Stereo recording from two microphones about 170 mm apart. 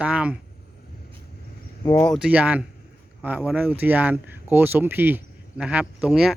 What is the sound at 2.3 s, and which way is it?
Speech, 10° right (ahead or behind).